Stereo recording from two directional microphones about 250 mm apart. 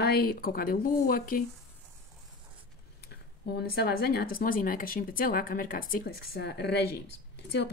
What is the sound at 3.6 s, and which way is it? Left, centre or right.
Speech, left.